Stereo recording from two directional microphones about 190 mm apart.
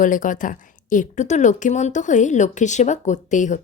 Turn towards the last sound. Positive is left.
turn(degrees=40)  # may be behind; listen again after turning